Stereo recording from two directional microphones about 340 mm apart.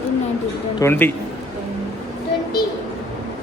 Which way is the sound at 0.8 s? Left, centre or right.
Centre.